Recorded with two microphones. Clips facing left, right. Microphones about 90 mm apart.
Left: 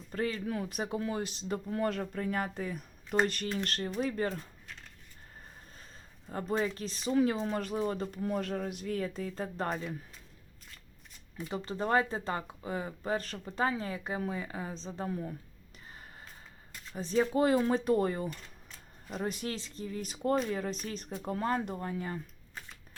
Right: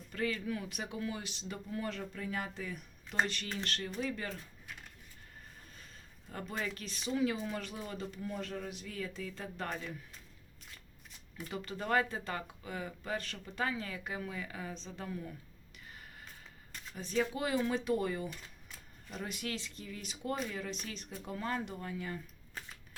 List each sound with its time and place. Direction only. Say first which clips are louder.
0.1 s speech: left 3 dB; 35° left (ahead or behind)
6.2 s speech: left 8 dB; 30° left (ahead or behind)
11.5 s speech: left 4 dB; 30° left (ahead or behind)
16.9 s speech: left 5 dB; 35° left (ahead or behind)